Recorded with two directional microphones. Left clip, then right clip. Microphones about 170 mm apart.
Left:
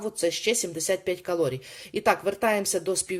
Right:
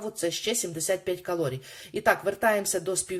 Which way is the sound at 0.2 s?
15° left (ahead or behind).